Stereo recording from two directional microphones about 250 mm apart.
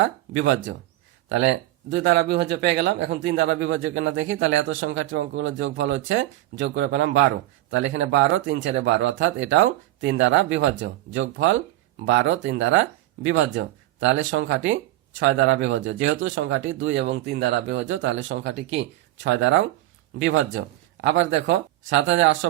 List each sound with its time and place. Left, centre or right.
0.0 s speech: right